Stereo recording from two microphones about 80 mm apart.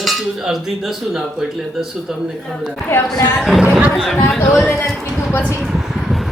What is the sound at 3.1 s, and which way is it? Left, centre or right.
A child's voice, centre.